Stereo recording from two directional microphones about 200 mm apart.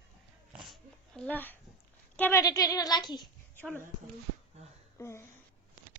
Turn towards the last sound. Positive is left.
turn(degrees=15)  # may be behind; listen again after turning